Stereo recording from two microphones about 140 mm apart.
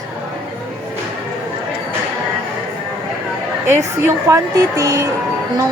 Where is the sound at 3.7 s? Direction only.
20° right (ahead or behind).